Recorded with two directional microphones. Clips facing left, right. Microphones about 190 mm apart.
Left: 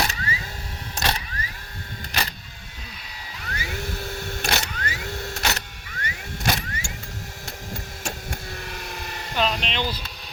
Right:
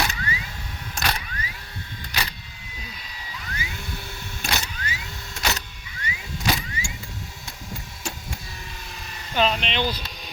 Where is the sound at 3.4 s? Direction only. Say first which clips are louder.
Left 5 dB; 50° left (ahead or behind).